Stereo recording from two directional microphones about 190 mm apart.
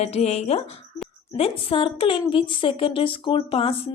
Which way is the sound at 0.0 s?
35° left (ahead or behind).